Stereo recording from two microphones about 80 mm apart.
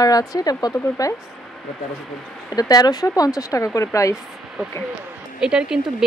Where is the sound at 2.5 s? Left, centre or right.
Left.